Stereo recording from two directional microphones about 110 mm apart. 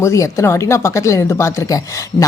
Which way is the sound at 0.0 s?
30° left (ahead or behind).